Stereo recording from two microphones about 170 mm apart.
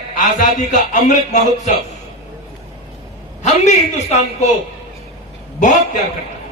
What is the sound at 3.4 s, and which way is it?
A man's voice, 45° left (ahead or behind).